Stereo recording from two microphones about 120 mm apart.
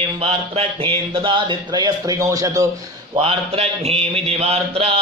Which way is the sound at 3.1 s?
55° right (ahead or behind).